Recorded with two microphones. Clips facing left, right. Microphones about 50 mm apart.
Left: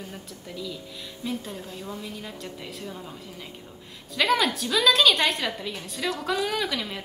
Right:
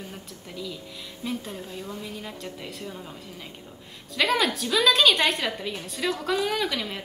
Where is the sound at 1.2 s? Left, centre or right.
Centre.